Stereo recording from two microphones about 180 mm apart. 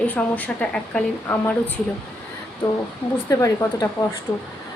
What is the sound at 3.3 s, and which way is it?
Speech, 20° left (ahead or behind).